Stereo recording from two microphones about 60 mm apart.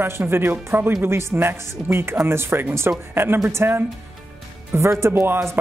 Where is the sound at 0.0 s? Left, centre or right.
Right.